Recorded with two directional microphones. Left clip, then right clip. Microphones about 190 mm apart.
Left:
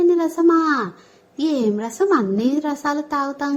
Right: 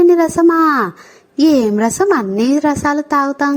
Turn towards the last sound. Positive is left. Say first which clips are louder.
# right 8 dB
turn(degrees=-35)  # may be behind; listen again after turning